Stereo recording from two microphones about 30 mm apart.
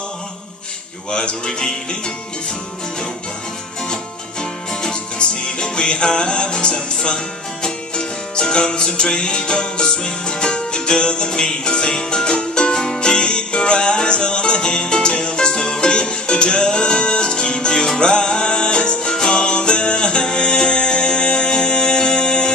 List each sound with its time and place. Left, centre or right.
1.1 s speech: left
1.5 s speech: left
4.4 s music: left